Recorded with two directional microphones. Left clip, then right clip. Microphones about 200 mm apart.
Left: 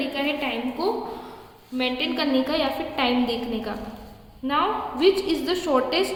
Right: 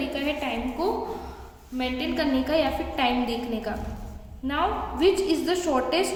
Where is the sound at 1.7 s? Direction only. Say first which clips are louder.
Left 3 dB; 20° left (ahead or behind).